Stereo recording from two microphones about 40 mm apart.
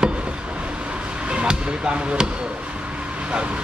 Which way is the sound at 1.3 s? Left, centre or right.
Right.